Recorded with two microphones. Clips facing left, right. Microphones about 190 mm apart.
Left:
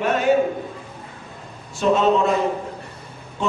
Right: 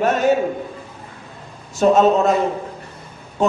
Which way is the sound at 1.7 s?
45° right (ahead or behind).